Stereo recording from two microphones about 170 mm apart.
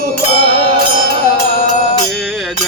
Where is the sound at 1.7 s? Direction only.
45° left (ahead or behind).